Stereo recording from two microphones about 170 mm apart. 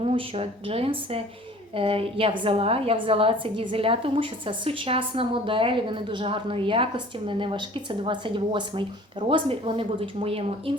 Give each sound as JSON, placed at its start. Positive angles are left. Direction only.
{"t": 0.0, "sound": "a woman's voice", "side_deg": -35}